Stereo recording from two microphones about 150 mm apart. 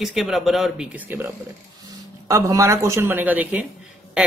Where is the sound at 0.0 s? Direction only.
Centre (ahead or behind).